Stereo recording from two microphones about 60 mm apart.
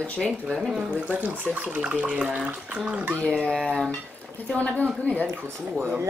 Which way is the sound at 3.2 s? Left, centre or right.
Centre.